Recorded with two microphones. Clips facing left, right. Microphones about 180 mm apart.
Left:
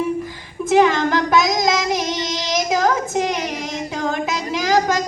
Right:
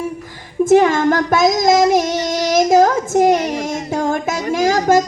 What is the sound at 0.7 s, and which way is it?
Female singing, 45° right (ahead or behind).